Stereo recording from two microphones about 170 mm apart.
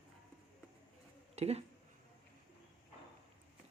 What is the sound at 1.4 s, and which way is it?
Speech, 40° right (ahead or behind).